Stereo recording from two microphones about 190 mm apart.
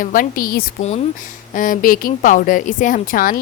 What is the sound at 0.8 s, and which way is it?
Speech, 35° left (ahead or behind).